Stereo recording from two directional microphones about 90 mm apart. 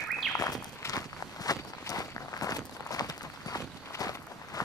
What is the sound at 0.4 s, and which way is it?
Walk, 45° left (ahead or behind).